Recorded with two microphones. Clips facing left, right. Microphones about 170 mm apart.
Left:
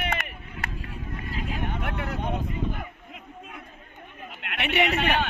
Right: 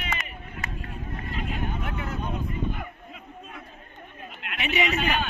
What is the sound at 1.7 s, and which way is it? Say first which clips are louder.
Vehicle: left 1 dB; 65° left (ahead or behind).